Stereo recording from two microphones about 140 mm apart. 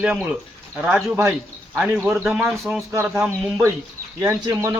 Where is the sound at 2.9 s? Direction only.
15° right (ahead or behind).